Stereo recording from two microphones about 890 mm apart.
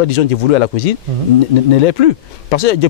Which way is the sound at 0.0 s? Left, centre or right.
Left.